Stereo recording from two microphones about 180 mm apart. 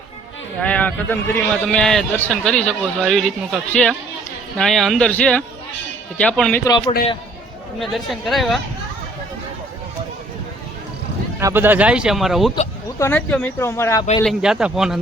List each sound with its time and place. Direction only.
0.6 s a man's voice: 10° left (ahead or behind)
6.7 s a man's voice: 25° left (ahead or behind)
7.8 s a man's voice: centre (ahead or behind)
11.3 s speech: 15° right (ahead or behind)
13.0 s speech: 10° left (ahead or behind)
14.3 s a man's voice: 5° right (ahead or behind)